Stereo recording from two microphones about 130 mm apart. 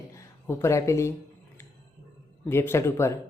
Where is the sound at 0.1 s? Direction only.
20° left (ahead or behind).